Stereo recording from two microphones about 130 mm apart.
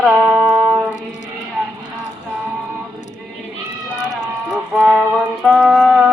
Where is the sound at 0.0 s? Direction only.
10° right (ahead or behind).